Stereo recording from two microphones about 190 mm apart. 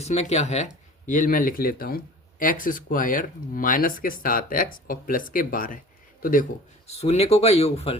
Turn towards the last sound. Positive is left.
turn(degrees=35)  # may be behind; listen again after turning